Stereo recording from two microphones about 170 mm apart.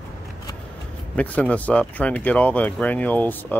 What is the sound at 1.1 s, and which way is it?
Speech, 10° left (ahead or behind).